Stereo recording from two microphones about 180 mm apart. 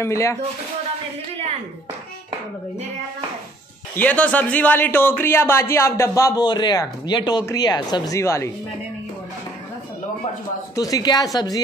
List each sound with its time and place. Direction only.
0.0 s speech: 15° left (ahead or behind)
3.9 s speech: 10° left (ahead or behind)
10.8 s speech: 20° left (ahead or behind)